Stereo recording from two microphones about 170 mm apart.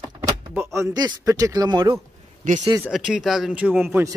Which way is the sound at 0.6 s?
15° right (ahead or behind).